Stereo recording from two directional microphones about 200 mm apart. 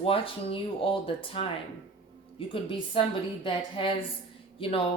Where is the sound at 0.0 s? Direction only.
25° left (ahead or behind).